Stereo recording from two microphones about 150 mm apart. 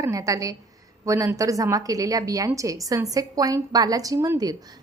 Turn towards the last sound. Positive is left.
turn(degrees=-25)  # may be behind; listen again after turning